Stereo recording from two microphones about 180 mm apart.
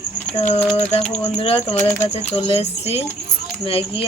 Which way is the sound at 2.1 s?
35° left (ahead or behind).